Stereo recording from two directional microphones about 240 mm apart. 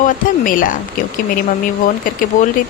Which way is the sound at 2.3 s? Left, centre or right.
Left.